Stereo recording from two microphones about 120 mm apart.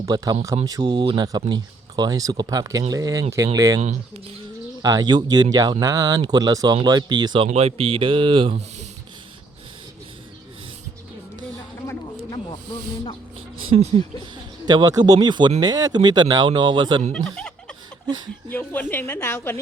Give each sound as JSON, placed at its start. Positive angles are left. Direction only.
{"t": 0.0, "sound": "speech", "side_deg": -35}
{"t": 3.8, "sound": "speech", "side_deg": -65}
{"t": 4.8, "sound": "speech", "side_deg": -35}
{"t": 7.4, "sound": "speech", "side_deg": -55}
{"t": 14.7, "sound": "speech", "side_deg": -35}
{"t": 17.1, "sound": "snicker", "side_deg": 5}
{"t": 18.5, "sound": "a woman's voice", "side_deg": 15}